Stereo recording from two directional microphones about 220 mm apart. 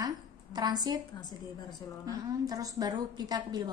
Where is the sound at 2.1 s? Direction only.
15° right (ahead or behind).